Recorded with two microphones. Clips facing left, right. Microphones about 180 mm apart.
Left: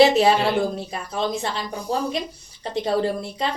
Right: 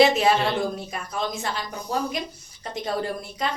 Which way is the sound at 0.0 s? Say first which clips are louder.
Left 3 dB; 30° left (ahead or behind).